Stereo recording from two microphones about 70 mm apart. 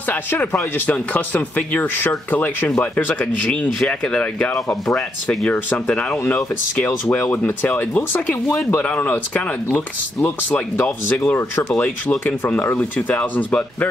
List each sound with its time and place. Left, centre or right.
0.1 s speech: left
4.8 s speech: centre
5.9 s speech: centre
10.8 s speech: left
11.8 s speech: left